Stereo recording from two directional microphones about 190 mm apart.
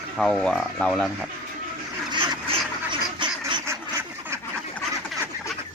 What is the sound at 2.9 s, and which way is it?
Duck, 25° right (ahead or behind).